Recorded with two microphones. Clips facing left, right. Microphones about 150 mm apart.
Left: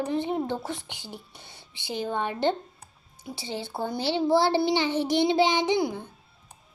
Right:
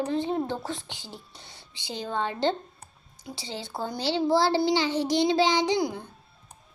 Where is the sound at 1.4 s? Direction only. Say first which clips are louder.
Even; 15° left (ahead or behind).